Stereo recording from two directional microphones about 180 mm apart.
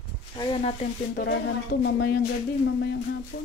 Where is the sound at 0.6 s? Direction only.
35° left (ahead or behind).